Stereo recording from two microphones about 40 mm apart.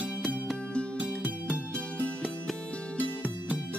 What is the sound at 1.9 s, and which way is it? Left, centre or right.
Music, left.